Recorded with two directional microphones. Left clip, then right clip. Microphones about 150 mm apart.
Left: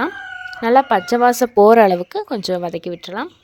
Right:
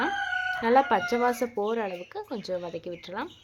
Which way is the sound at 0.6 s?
40° left (ahead or behind).